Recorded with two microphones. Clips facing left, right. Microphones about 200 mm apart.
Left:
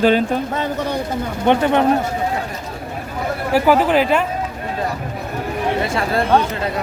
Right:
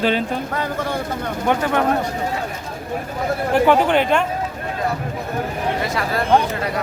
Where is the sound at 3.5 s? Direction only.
5° left (ahead or behind).